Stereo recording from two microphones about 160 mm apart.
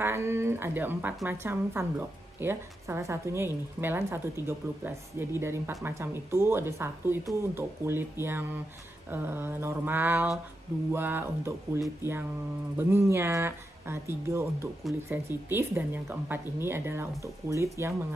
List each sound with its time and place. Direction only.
0.0 s speech: 15° right (ahead or behind)